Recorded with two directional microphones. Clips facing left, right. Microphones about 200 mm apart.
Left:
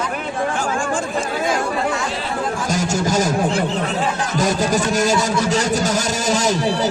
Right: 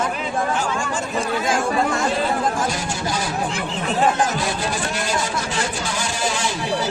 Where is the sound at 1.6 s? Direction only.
45° right (ahead or behind).